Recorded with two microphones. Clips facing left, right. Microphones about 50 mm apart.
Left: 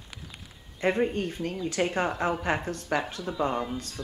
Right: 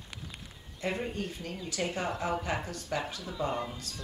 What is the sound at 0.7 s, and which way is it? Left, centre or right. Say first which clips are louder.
Speech: left 8 dB; left.